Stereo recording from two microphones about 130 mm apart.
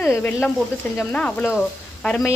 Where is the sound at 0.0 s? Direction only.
20° left (ahead or behind).